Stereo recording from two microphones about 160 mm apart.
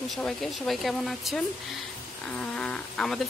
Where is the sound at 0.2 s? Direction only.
Centre (ahead or behind).